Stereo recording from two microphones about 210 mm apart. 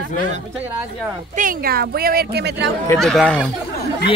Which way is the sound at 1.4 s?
45° right (ahead or behind).